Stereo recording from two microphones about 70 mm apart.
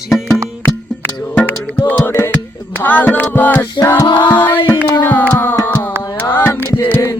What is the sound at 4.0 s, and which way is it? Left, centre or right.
Music, left.